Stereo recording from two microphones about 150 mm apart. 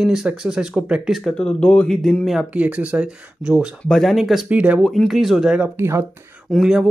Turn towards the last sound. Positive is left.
turn(degrees=0)  # may be behind; listen again after turning